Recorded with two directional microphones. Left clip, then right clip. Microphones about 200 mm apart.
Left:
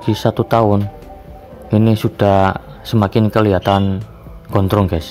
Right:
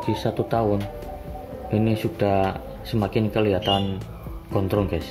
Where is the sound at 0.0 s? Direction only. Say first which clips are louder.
Left 8 dB; 50° left (ahead or behind).